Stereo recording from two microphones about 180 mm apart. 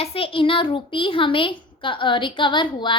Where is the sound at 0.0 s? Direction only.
30° left (ahead or behind).